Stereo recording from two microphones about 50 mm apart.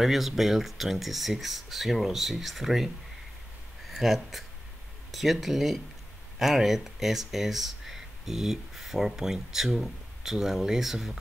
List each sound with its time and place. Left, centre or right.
0.0 s speech: centre
3.9 s speech: centre